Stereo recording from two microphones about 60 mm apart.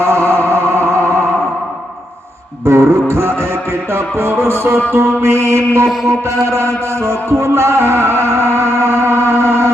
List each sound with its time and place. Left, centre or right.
0.0 s music: right
2.6 s music: right